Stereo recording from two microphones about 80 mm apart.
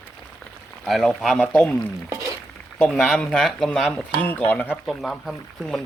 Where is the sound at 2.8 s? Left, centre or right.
Centre.